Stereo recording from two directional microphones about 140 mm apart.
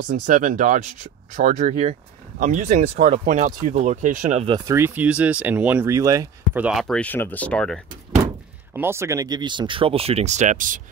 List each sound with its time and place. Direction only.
0.0 s speech: 70° right (ahead or behind)
4.6 s speech: 15° right (ahead or behind)
5.9 s speech: 25° right (ahead or behind)
6.5 s speech: 5° right (ahead or behind)
8.7 s speech: 20° right (ahead or behind); by 10.8 s 65° right (ahead or behind)